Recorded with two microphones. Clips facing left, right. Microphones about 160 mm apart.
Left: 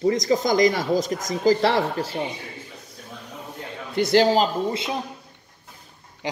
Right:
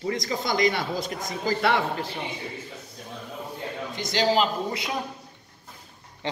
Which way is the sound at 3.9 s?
60° left (ahead or behind).